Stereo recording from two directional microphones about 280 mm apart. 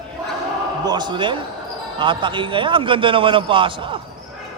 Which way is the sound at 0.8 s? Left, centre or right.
Centre.